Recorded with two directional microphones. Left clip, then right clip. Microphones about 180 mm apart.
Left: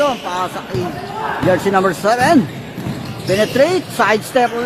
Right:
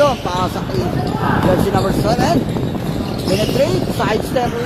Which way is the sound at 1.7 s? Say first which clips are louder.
Left 3 dB; 25° left (ahead or behind).